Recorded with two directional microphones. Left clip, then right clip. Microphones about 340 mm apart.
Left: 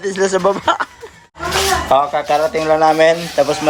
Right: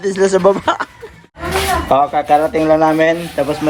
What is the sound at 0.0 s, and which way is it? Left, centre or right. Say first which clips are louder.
Speech: right 3 dB; centre.